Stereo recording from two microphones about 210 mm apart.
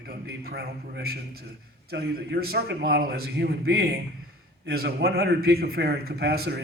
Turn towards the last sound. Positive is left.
turn(degrees=-50)  # may be behind; listen again after turning